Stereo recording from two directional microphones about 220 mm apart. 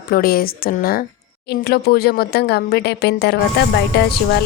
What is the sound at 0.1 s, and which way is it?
Speech, 45° left (ahead or behind).